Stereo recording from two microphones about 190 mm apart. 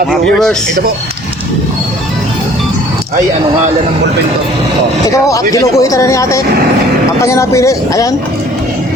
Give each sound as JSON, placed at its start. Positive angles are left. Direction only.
{"t": 0.1, "sound": "speech", "side_deg": 0}
{"t": 5.0, "sound": "speech", "side_deg": 15}